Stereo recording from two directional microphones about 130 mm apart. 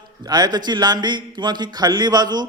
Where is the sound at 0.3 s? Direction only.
30° right (ahead or behind).